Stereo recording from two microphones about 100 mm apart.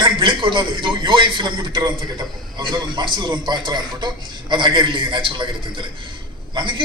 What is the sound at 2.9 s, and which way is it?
A man's voice, 50° right (ahead or behind).